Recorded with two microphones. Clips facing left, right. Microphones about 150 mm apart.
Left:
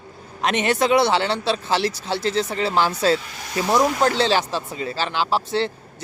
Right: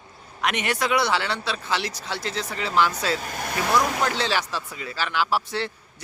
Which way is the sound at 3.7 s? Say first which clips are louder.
Left 5 dB; 30° left (ahead or behind).